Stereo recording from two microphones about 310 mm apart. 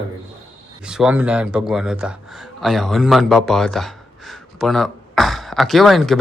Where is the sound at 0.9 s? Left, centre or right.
Centre.